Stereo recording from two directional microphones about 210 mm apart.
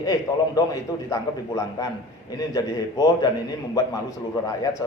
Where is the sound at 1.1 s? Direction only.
15° left (ahead or behind).